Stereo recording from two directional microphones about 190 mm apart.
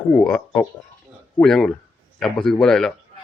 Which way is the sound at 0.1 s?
5° left (ahead or behind).